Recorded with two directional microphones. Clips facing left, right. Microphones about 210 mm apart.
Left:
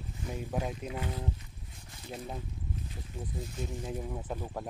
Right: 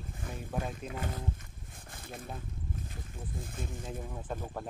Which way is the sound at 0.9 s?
45° right (ahead or behind).